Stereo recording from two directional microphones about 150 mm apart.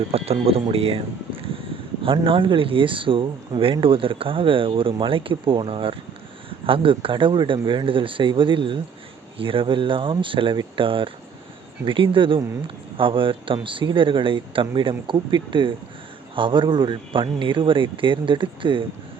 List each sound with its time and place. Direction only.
0.4 s speech: 40° right (ahead or behind)